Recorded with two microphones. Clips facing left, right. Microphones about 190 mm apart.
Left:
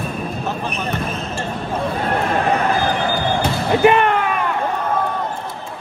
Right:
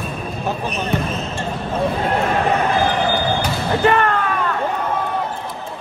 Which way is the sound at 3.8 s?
15° left (ahead or behind).